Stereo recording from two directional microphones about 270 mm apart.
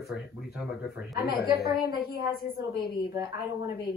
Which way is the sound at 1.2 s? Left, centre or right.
Left.